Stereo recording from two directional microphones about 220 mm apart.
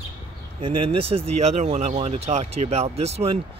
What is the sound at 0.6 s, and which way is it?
Speech, 25° right (ahead or behind).